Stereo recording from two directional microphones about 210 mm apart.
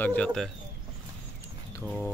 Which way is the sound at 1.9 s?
Centre (ahead or behind).